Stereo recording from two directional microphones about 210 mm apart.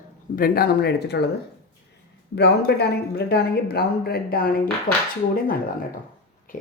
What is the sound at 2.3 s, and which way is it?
Speech, 50° left (ahead or behind).